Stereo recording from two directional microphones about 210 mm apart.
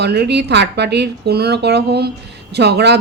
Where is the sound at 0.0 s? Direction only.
50° right (ahead or behind).